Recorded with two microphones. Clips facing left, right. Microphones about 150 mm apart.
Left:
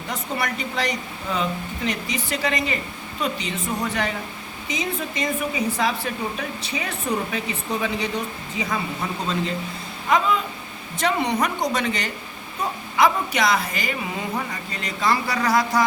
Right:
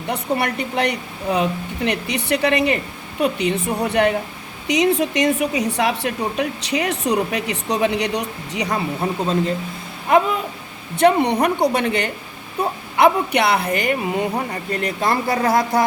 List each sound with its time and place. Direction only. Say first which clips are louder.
0.1 s a woman's voice: right 6 dB; 60° right (ahead or behind)
4.7 s a woman's voice: right 10 dB; 75° right (ahead or behind)
9.0 s speech: right 6 dB; 45° right (ahead or behind)
10.9 s a woman's voice: right 7 dB; 60° right (ahead or behind)